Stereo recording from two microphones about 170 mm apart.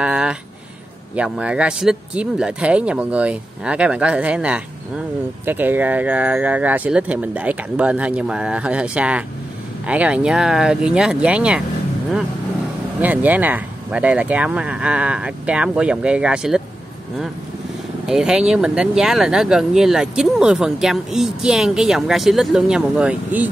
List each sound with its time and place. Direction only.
0.0 s a sound: 5° right (ahead or behind)
1.1 s speech: 5° right (ahead or behind)
13.0 s speech: 10° right (ahead or behind)
18.0 s speech: 5° right (ahead or behind)